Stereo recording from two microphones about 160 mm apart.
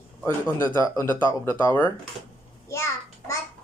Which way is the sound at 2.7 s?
15° left (ahead or behind).